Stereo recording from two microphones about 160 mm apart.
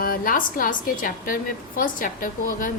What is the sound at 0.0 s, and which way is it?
A woman's voice, 65° left (ahead or behind).